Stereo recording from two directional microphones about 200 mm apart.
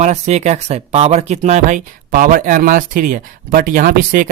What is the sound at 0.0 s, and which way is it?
Speech, 35° right (ahead or behind).